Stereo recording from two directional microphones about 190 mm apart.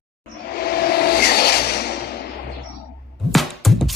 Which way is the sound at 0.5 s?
55° left (ahead or behind).